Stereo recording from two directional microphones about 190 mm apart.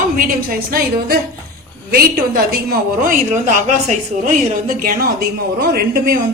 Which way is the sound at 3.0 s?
40° right (ahead or behind).